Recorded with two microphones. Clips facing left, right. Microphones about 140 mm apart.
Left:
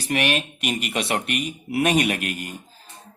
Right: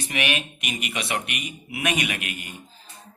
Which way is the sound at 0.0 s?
40° left (ahead or behind).